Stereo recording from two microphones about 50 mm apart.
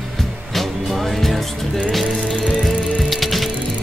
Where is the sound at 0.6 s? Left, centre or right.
Centre.